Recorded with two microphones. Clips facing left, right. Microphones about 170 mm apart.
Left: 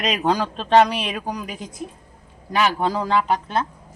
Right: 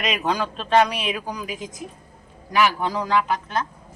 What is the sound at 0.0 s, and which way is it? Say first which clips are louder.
Speech: left 3 dB; 35° left (ahead or behind).